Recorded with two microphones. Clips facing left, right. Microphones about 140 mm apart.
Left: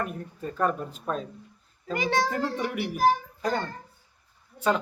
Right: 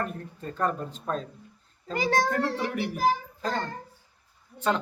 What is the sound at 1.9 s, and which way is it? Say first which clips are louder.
Speech: right 1 dB; 40° right (ahead or behind).